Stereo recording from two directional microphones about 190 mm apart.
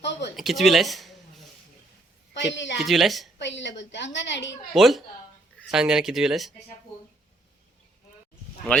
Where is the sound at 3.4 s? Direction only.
70° left (ahead or behind).